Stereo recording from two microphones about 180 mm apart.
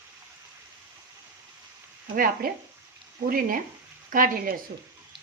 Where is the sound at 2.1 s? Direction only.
50° right (ahead or behind).